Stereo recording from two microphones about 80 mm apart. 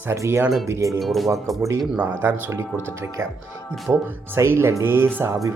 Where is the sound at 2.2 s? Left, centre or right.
Right.